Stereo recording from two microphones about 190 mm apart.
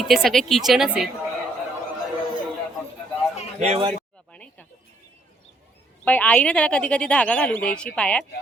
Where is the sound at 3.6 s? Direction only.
35° right (ahead or behind).